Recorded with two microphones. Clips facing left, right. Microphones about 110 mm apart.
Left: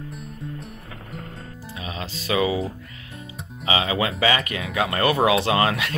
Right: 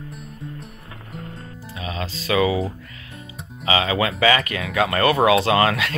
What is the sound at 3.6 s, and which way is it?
Speech, 20° left (ahead or behind).